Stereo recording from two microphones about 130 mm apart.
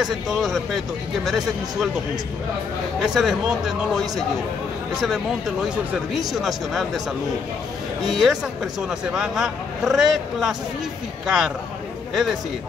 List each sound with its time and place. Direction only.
0.0 s speech: centre (ahead or behind)
3.0 s speech: centre (ahead or behind)
6.1 s speech: centre (ahead or behind)
8.0 s a man's voice: centre (ahead or behind)